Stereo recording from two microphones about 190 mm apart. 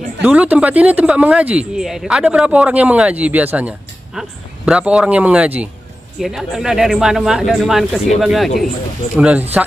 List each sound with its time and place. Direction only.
0.2 s speech: 10° right (ahead or behind)